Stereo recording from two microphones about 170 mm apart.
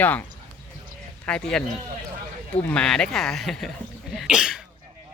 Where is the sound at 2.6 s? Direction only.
5° left (ahead or behind).